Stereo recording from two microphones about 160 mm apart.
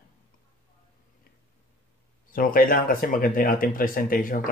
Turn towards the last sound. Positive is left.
turn(degrees=60)  # may be behind; listen again after turning